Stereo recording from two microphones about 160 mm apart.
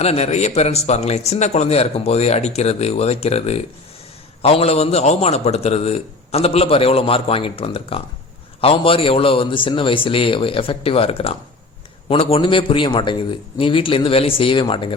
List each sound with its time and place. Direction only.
0.0 s speech: 40° left (ahead or behind)